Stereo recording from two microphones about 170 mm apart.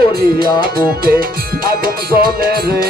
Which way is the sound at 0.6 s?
60° right (ahead or behind).